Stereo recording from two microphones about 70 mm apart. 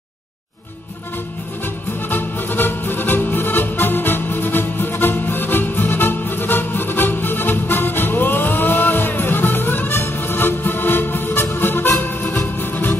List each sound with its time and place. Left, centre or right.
2.0 s music: left